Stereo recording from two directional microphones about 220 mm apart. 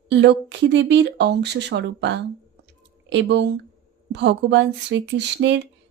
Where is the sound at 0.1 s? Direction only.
50° right (ahead or behind).